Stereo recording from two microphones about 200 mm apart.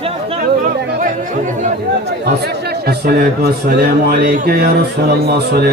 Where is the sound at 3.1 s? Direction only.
55° right (ahead or behind).